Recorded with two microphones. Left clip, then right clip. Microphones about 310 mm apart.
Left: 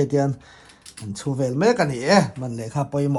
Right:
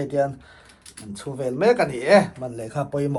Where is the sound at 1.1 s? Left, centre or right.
Left.